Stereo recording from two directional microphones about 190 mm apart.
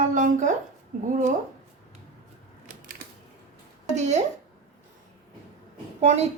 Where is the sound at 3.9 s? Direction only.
35° right (ahead or behind).